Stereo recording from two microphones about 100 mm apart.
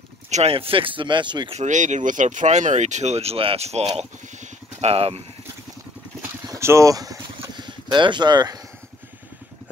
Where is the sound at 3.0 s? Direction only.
90° right.